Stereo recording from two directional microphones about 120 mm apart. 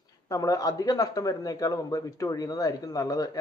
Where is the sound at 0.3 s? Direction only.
30° left (ahead or behind).